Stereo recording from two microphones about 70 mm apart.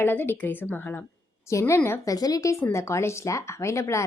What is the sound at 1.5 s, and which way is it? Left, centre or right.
Speech, left.